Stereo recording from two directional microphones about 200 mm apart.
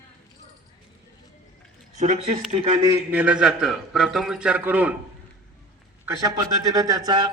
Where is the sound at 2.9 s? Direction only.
10° right (ahead or behind).